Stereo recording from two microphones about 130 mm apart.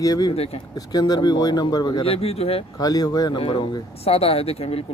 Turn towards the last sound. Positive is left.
turn(degrees=50)  # may be behind; listen again after turning